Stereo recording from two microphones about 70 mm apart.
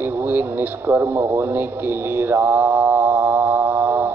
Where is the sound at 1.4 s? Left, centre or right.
Right.